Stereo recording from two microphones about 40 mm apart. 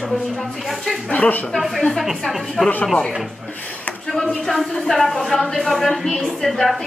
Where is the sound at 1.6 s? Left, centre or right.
Centre.